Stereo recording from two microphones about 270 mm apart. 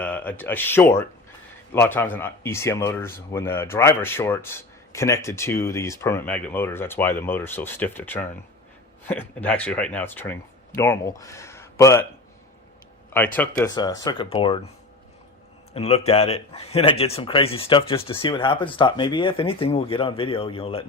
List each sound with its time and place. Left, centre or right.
0.0 s speech: centre
13.1 s speech: centre
15.7 s speech: left